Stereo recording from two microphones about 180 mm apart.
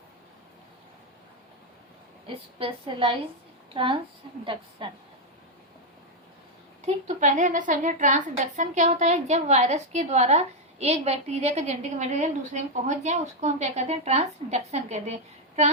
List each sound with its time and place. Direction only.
2.2 s a woman's voice: 30° right (ahead or behind)
4.8 s a woman's voice: 25° right (ahead or behind)
6.8 s a woman's voice: 40° right (ahead or behind)